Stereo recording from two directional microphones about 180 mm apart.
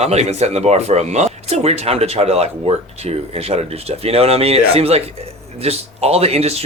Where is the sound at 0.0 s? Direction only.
35° right (ahead or behind).